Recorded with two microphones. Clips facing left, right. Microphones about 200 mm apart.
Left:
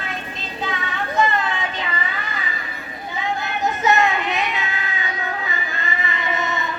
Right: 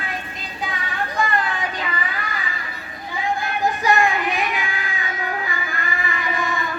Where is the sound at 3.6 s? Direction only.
20° left (ahead or behind).